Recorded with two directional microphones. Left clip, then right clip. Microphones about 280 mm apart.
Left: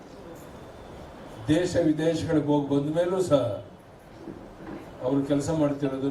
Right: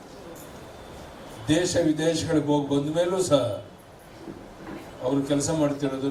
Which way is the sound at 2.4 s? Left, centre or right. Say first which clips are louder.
Right 1 dB; left.